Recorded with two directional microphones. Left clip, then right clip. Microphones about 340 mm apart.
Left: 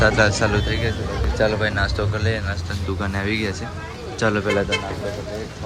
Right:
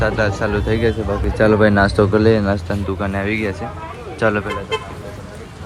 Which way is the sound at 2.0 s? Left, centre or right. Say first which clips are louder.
Right 11 dB; right.